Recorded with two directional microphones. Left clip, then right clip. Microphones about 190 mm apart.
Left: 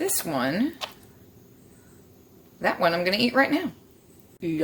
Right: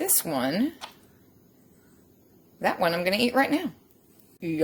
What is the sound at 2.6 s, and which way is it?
A woman's voice, 30° right (ahead or behind).